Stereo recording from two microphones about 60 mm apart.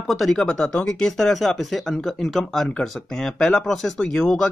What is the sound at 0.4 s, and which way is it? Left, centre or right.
Speech, centre.